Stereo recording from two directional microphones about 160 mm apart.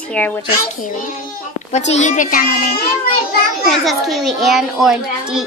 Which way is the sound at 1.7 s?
45° left (ahead or behind).